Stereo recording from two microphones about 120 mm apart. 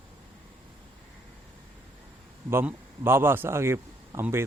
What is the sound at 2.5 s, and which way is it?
A man's voice, 20° right (ahead or behind).